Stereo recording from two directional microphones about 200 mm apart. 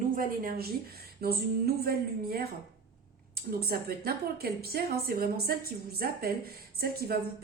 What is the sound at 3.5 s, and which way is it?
Speech, 50° right (ahead or behind).